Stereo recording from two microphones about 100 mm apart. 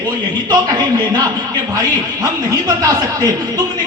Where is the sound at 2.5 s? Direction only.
35° right (ahead or behind).